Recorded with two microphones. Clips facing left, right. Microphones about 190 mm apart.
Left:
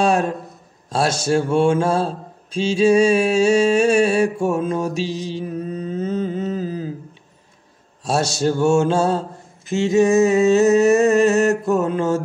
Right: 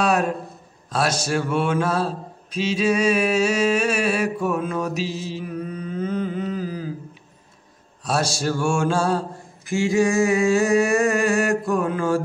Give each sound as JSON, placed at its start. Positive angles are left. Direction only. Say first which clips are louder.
{"t": 0.0, "sound": "a sound", "louder": "left 3 dB", "side_deg": 25}
{"t": 0.8, "sound": "mantra", "louder": "left 4 dB", "side_deg": 25}
{"t": 8.0, "sound": "mantra", "louder": "left 4 dB", "side_deg": 25}